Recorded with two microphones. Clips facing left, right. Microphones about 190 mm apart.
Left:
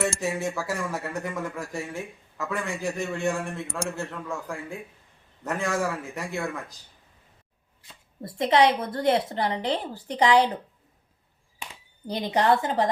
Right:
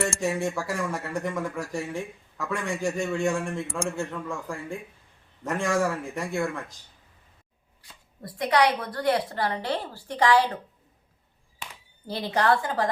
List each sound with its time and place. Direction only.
0.0 s a man's voice: centre (ahead or behind)
7.8 s speech: 25° left (ahead or behind)
12.0 s speech: 15° left (ahead or behind)